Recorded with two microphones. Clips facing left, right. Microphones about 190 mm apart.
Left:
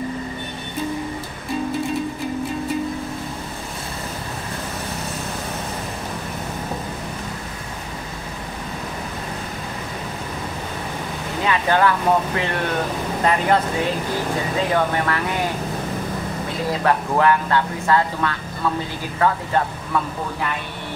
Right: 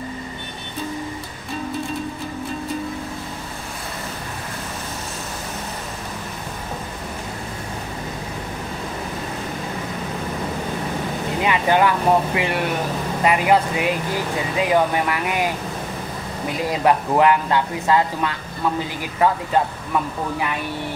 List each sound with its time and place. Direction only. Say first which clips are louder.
11.4 s vehicle: even; 15° right (ahead or behind)
12.4 s speech: right 1 dB; 10° right (ahead or behind)
16.7 s speech: right 2 dB; 15° right (ahead or behind)